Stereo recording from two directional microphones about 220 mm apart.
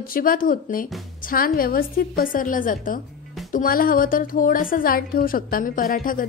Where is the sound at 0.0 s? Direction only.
40° left (ahead or behind).